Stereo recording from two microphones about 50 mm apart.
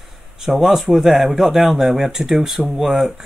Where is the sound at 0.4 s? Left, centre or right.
Centre.